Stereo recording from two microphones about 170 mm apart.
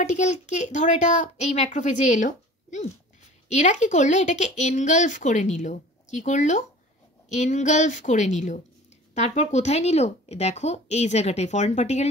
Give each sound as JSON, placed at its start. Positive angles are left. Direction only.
{"t": 0.0, "sound": "speech", "side_deg": 45}